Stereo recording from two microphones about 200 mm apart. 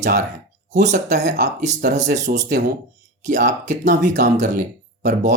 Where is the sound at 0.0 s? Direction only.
40° right (ahead or behind).